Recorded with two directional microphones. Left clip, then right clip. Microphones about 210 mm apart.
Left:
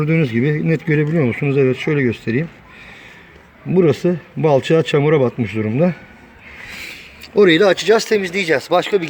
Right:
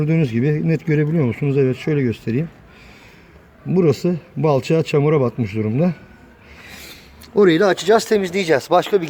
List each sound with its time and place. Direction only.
0.0 s a man's voice: centre (ahead or behind)
3.7 s a man's voice: centre (ahead or behind)
7.3 s a man's voice: 5° right (ahead or behind)
7.9 s speech: 15° right (ahead or behind)